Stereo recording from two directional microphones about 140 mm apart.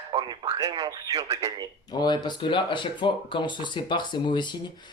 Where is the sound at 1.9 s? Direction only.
30° left (ahead or behind).